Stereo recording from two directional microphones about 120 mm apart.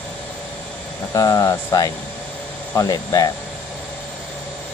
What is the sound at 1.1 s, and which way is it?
Speech, 30° left (ahead or behind).